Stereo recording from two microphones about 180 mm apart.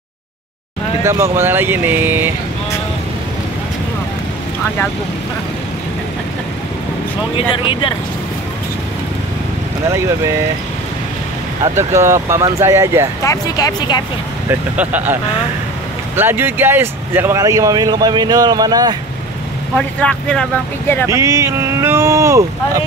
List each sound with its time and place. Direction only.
1.0 s speech: 15° right (ahead or behind)
7.3 s speech: 30° left (ahead or behind)
11.7 s speech: 15° right (ahead or behind)
13.2 s speech: 20° left (ahead or behind)
14.5 s speech: 10° right (ahead or behind)
16.2 s speech: 10° right (ahead or behind)
19.7 s speech: 5° left (ahead or behind)
21.1 s speech: 15° right (ahead or behind)